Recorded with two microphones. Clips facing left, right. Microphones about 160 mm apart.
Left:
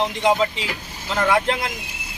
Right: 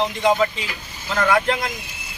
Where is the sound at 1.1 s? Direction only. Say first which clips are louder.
Even; 15° left (ahead or behind).